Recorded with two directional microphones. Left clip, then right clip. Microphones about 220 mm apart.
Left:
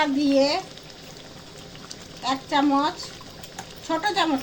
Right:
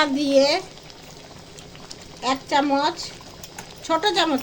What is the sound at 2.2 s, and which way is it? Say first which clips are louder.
A woman's voice: right 2 dB; 55° right (ahead or behind).